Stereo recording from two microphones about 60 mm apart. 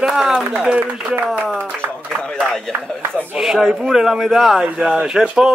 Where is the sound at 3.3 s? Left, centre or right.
Centre.